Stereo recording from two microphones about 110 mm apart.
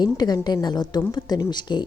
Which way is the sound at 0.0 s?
40° left (ahead or behind).